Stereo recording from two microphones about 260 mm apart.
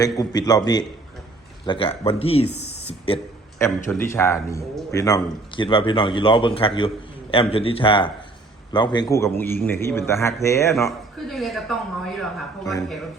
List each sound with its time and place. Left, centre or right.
0.0 s a man's voice: centre
2.6 s a sound: left
3.8 s a man's voice: centre
11.3 s speech: centre